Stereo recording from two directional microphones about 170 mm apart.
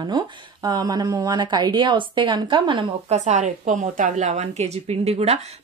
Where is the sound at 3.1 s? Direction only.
40° right (ahead or behind).